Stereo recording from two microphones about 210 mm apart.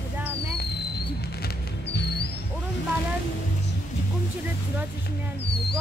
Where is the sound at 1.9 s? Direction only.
55° left (ahead or behind).